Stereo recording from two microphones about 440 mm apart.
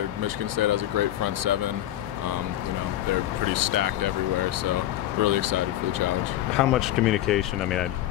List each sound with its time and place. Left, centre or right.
0.2 s speech: right
3.7 s speech: right
5.2 s speech: right
6.5 s speech: centre